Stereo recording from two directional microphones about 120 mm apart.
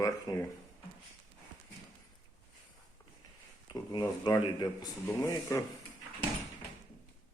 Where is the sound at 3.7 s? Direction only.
35° left (ahead or behind).